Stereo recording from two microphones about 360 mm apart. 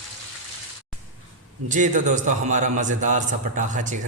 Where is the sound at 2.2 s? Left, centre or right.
Right.